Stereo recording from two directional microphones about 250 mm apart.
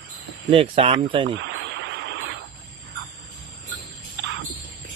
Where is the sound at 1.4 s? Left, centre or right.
Right.